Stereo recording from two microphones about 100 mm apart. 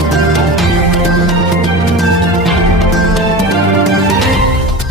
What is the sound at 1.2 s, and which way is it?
Music, centre (ahead or behind).